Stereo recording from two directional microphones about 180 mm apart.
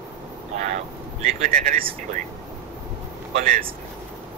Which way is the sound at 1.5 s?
50° right (ahead or behind).